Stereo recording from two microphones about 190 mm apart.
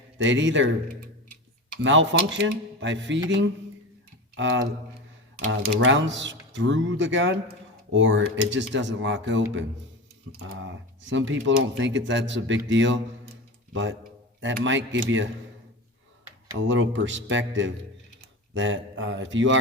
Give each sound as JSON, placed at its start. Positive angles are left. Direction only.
{"t": 0.2, "sound": "speech", "side_deg": -75}
{"t": 1.8, "sound": "speech", "side_deg": -80}
{"t": 4.4, "sound": "speech", "side_deg": -75}
{"t": 11.1, "sound": "speech", "side_deg": -75}
{"t": 14.4, "sound": "speech", "side_deg": -75}
{"t": 16.6, "sound": "speech", "side_deg": -75}